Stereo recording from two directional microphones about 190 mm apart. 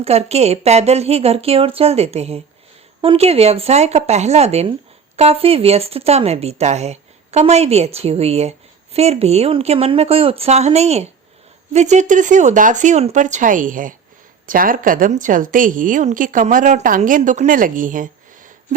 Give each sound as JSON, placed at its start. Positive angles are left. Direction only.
{"t": 0.0, "sound": "a woman's voice", "side_deg": -35}